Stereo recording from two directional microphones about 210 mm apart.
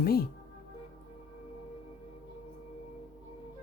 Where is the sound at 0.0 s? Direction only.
45° left (ahead or behind).